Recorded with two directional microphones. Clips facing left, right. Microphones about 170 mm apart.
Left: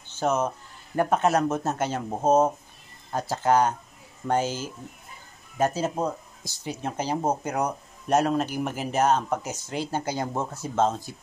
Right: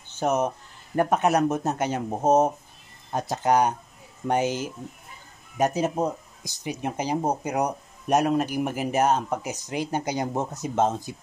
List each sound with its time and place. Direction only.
0.1 s speech: 15° right (ahead or behind)